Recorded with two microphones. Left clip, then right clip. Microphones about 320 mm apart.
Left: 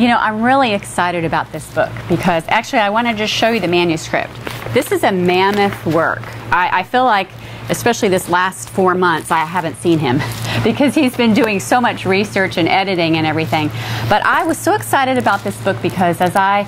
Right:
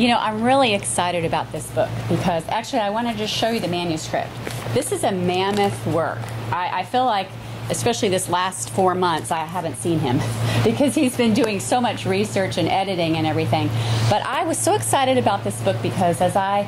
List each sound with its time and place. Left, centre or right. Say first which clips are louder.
0.0 s a woman's voice: left 5 dB; left